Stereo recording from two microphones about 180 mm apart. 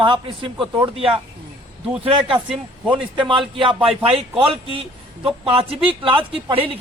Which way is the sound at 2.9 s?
30° right (ahead or behind).